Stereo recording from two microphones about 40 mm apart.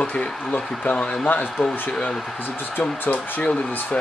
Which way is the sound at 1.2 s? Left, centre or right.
Left.